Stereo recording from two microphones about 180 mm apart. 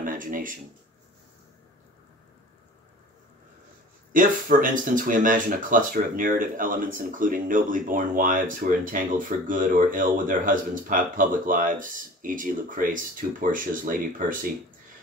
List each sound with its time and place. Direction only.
0.0 s speech: 50° right (ahead or behind)
4.1 s speech: 45° right (ahead or behind)